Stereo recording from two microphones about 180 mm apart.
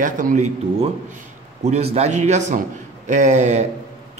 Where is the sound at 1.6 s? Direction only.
35° right (ahead or behind).